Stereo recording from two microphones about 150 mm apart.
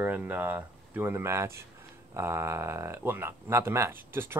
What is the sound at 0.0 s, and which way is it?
Speech, 15° right (ahead or behind).